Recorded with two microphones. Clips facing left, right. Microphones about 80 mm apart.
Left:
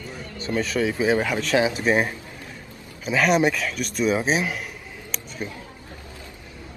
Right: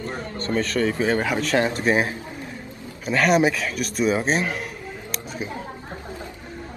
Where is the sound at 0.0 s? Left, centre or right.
Right.